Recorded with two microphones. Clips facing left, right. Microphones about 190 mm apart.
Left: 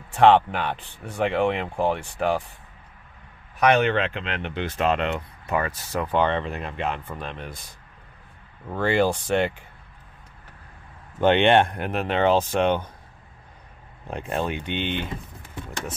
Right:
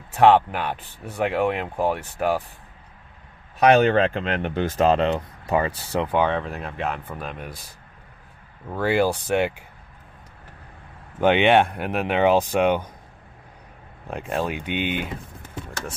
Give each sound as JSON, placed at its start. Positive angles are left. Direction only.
{"t": 0.1, "sound": "speech", "side_deg": -5}
{"t": 3.5, "sound": "speech", "side_deg": -30}
{"t": 6.0, "sound": "speech", "side_deg": -10}
{"t": 8.6, "sound": "speech", "side_deg": -5}
{"t": 11.1, "sound": "speech", "side_deg": -5}
{"t": 14.1, "sound": "speech", "side_deg": 0}